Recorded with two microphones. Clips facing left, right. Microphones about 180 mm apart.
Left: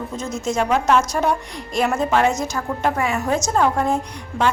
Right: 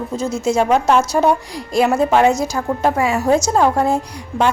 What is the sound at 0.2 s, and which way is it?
Speech, 10° right (ahead or behind).